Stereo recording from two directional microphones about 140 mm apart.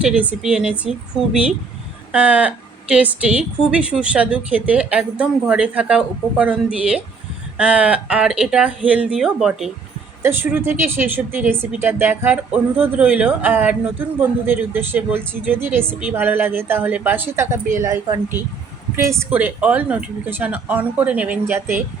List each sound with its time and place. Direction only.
0.0 s a woman's voice: 10° right (ahead or behind)
10.2 s a woman's voice: 15° right (ahead or behind)
19.0 s a woman's voice: 20° right (ahead or behind)